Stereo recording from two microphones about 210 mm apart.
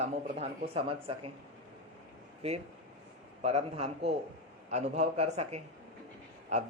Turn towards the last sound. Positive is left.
turn(degrees=-30)  # may be behind; listen again after turning